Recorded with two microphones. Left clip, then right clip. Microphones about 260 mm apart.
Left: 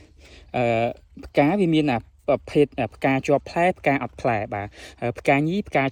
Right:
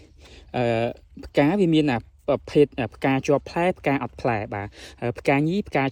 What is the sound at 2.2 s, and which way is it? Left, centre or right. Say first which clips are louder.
Speech: right 1 dB; left.